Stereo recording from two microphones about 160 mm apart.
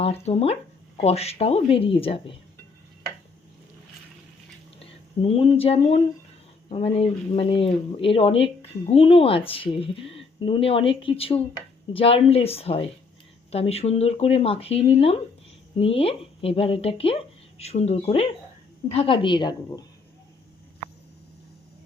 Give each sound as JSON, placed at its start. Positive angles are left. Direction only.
{"t": 0.0, "sound": "speech", "side_deg": 40}
{"t": 4.8, "sound": "a woman's voice", "side_deg": 35}